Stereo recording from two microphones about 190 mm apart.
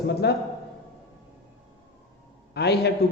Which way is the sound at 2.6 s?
60° left (ahead or behind).